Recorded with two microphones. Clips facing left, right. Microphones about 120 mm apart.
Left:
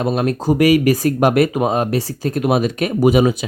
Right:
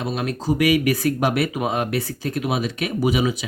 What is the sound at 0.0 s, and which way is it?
Speech, 45° left (ahead or behind).